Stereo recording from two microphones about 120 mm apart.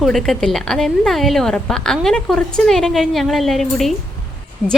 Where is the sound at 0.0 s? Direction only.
Centre (ahead or behind).